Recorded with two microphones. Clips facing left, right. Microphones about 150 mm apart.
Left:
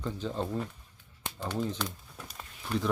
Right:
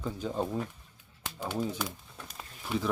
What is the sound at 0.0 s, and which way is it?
Speech, 10° right (ahead or behind).